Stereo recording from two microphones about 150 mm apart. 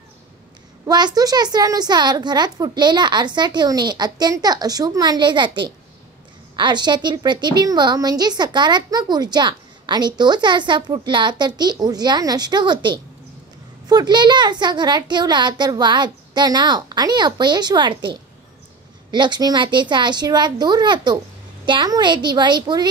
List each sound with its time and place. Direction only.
0.8 s a woman's voice: 25° right (ahead or behind)